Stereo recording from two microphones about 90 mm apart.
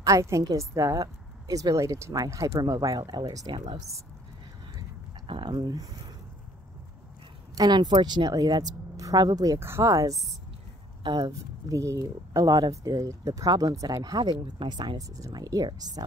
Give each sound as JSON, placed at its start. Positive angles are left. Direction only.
{"t": 0.0, "sound": "a woman's voice", "side_deg": -35}
{"t": 5.2, "sound": "speech", "side_deg": -80}
{"t": 7.5, "sound": "speech", "side_deg": -50}
{"t": 9.6, "sound": "a woman's voice", "side_deg": -30}
{"t": 11.1, "sound": "speech", "side_deg": -50}
{"t": 14.4, "sound": "speech", "side_deg": -60}
{"t": 15.0, "sound": "speech", "side_deg": -40}